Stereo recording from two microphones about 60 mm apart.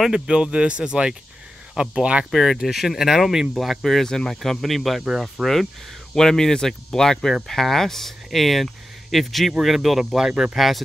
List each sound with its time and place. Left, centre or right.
0.1 s speech: centre
2.3 s speech: centre